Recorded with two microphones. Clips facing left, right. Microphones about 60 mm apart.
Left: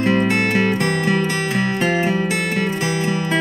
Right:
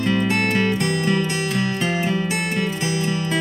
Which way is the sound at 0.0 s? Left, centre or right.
Left.